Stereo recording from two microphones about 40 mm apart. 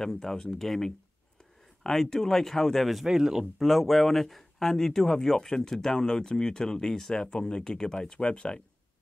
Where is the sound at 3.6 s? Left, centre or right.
Centre; by 8.6 s left.